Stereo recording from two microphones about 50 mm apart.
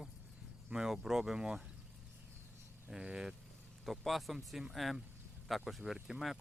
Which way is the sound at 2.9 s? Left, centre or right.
Centre.